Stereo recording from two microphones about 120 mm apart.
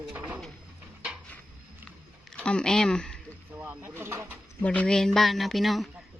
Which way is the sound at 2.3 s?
10° left (ahead or behind).